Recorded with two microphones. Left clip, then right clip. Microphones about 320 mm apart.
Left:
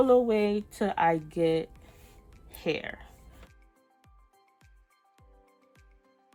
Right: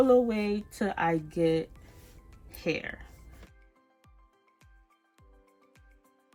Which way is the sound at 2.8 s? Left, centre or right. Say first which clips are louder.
Even; left.